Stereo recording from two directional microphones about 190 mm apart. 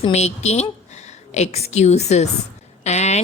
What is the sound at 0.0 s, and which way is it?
Speech, 35° left (ahead or behind).